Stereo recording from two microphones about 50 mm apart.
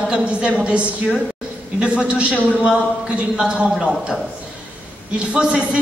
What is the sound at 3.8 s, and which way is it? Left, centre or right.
A woman's voice, centre.